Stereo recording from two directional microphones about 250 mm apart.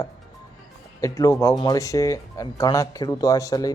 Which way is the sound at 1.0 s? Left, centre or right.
Centre.